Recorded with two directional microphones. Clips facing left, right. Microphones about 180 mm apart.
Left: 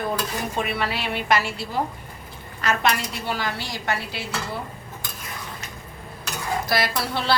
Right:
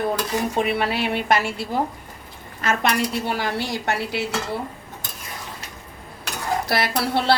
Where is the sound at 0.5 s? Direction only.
55° right (ahead or behind).